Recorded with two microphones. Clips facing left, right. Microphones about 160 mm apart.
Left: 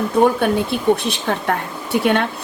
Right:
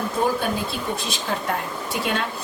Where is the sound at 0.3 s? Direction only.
65° left (ahead or behind).